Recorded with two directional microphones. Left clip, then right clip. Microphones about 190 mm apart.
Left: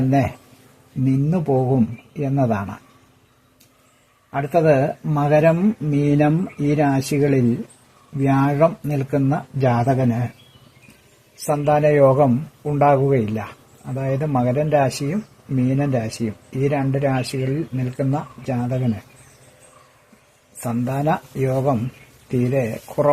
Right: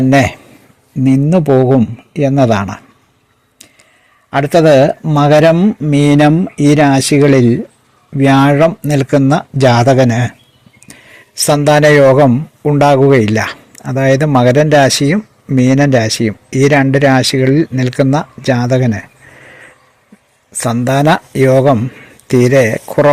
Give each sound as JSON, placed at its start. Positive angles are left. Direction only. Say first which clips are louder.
{"t": 0.1, "sound": "speech", "louder": "right 10 dB", "side_deg": -35}
{"t": 4.3, "sound": "speech", "louder": "right 9 dB", "side_deg": -45}
{"t": 11.4, "sound": "speech", "louder": "right 9 dB", "side_deg": -45}
{"t": 20.6, "sound": "speech", "louder": "right 12 dB", "side_deg": -45}